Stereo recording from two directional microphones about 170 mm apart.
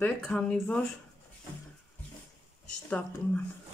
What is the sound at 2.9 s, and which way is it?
Speech, 10° left (ahead or behind).